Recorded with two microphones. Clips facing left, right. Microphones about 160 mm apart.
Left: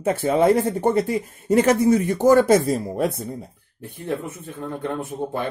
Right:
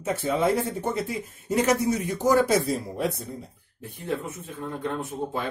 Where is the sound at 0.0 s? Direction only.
60° left (ahead or behind).